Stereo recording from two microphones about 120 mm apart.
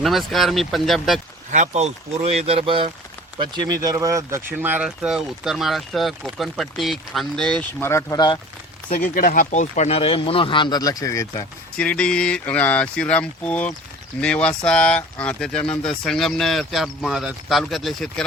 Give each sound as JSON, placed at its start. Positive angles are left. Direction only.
{"t": 0.0, "sound": "speech", "side_deg": 0}
{"t": 1.5, "sound": "speech", "side_deg": -85}
{"t": 3.3, "sound": "speech", "side_deg": -35}
{"t": 7.8, "sound": "speech", "side_deg": 20}
{"t": 9.3, "sound": "speech", "side_deg": 90}
{"t": 11.8, "sound": "speech", "side_deg": 10}